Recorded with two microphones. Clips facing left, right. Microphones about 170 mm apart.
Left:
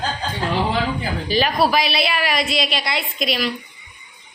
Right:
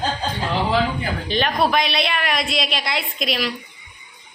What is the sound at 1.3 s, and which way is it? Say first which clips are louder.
A woman's voice: left 2 dB; 5° left (ahead or behind).